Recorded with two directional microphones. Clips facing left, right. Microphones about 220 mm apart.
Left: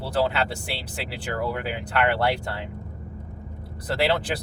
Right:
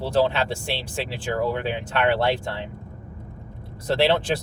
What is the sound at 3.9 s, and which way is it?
Speech, 25° right (ahead or behind).